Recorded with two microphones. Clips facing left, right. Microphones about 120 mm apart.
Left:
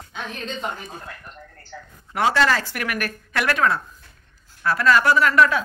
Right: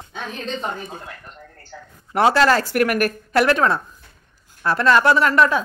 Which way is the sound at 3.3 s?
30° right (ahead or behind).